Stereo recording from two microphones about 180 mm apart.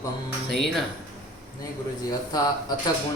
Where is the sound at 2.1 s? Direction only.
20° left (ahead or behind).